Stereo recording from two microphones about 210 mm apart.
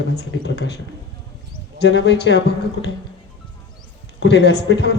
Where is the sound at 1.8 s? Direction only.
55° left (ahead or behind).